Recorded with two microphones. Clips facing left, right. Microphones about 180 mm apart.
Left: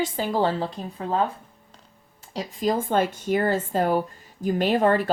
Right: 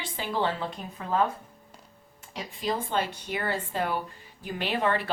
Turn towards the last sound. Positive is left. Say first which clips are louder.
# left 7 dB
turn(degrees=45)  # may be behind; listen again after turning